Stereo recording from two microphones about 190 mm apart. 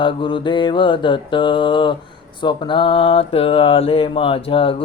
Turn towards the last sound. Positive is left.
turn(degrees=30)  # may be behind; listen again after turning